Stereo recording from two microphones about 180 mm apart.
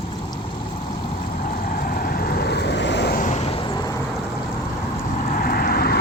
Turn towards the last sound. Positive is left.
turn(degrees=60)  # may be behind; listen again after turning